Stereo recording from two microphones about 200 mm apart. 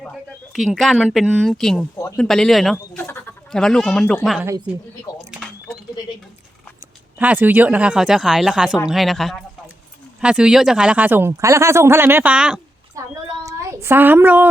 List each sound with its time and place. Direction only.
0.0 s speech: centre (ahead or behind)
2.7 s speech: 10° left (ahead or behind); by 4.8 s 5° right (ahead or behind)
7.2 s speech: 10° right (ahead or behind)
13.0 s speech: 15° right (ahead or behind)
13.4 s a sound: 15° right (ahead or behind)
13.8 s speech: 10° right (ahead or behind)